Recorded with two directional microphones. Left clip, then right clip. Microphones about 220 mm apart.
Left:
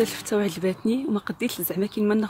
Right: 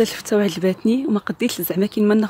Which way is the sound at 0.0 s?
20° right (ahead or behind).